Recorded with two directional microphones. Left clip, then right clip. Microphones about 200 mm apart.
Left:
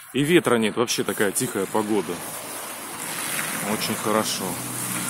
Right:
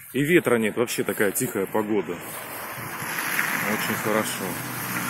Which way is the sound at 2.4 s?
35° left (ahead or behind).